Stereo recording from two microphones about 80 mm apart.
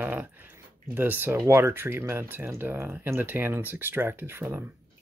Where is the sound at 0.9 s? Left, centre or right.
Right.